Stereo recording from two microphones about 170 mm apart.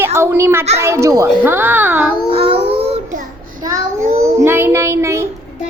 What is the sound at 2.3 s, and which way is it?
Child singing, 35° right (ahead or behind).